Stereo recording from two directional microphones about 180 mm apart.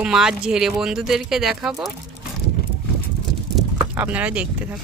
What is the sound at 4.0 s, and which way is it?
Speech, 10° right (ahead or behind).